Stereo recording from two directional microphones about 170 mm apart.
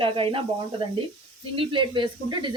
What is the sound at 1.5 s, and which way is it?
Speech, 30° right (ahead or behind).